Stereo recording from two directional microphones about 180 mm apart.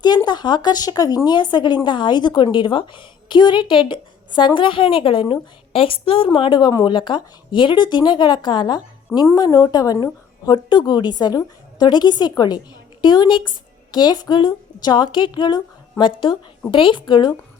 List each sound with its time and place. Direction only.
0.0 s speech: 25° left (ahead or behind)